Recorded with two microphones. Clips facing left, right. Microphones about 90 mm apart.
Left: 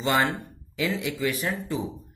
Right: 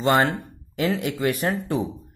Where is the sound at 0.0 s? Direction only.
50° right (ahead or behind).